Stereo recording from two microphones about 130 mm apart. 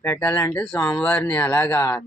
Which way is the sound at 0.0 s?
15° left (ahead or behind).